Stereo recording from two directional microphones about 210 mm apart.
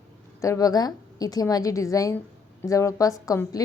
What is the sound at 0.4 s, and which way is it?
A woman's voice, 15° left (ahead or behind).